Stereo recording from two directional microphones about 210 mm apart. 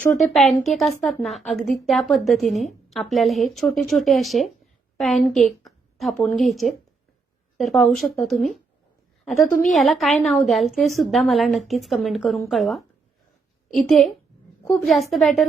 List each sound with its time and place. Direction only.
0.0 s a woman's voice: 5° left (ahead or behind)